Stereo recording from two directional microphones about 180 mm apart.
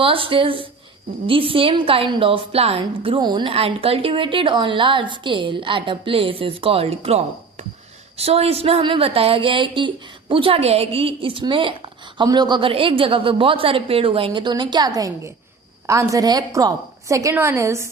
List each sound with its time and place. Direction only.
0.0 s a woman's voice: 30° right (ahead or behind)
8.2 s a woman's voice: 35° right (ahead or behind); by 17.8 s 15° right (ahead or behind)